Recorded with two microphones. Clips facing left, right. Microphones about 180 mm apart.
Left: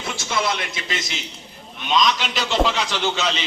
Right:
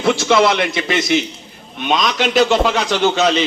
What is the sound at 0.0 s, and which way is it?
A man's voice, 75° right (ahead or behind).